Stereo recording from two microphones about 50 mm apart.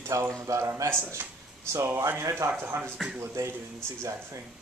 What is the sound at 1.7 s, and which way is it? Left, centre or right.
Speech, right.